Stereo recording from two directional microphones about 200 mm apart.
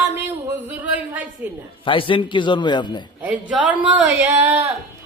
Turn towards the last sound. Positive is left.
turn(degrees=-10)  # may be behind; listen again after turning